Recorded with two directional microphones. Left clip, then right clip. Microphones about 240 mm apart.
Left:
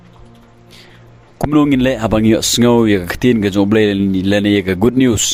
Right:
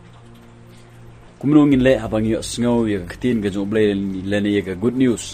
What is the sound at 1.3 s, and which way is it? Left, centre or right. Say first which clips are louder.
Speech: left 1 dB; left.